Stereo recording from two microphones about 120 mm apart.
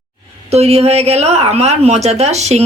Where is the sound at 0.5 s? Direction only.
60° right (ahead or behind).